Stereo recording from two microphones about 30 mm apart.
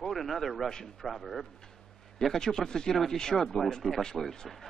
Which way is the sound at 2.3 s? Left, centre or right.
Centre.